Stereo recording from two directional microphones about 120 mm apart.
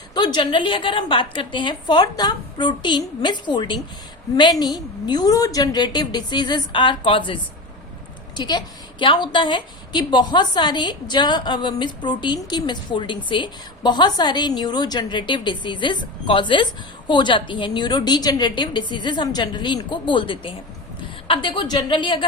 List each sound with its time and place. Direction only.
0.1 s a woman's voice: 40° left (ahead or behind)
8.4 s a woman's voice: 40° left (ahead or behind)